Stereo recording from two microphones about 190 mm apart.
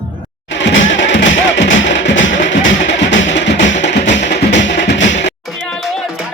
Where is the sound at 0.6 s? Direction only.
75° left (ahead or behind).